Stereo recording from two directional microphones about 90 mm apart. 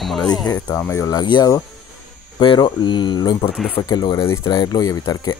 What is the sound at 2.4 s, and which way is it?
Speech, 65° left (ahead or behind).